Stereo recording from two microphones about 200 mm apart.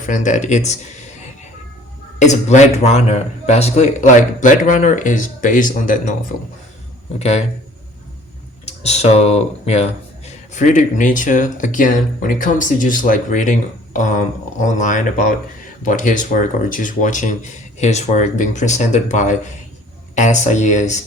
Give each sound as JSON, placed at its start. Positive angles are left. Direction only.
{"t": 0.0, "sound": "a man's voice", "side_deg": 40}
{"t": 2.1, "sound": "a man's voice", "side_deg": 35}
{"t": 7.2, "sound": "a man's voice", "side_deg": 35}
{"t": 8.8, "sound": "a man's voice", "side_deg": 35}